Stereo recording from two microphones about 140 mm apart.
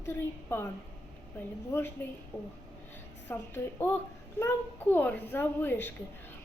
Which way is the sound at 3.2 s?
15° left (ahead or behind).